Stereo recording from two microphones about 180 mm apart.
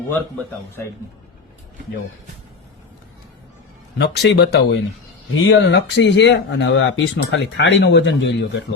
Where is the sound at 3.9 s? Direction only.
70° left (ahead or behind).